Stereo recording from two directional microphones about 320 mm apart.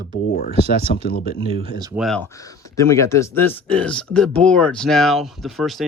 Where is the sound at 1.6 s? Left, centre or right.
Centre.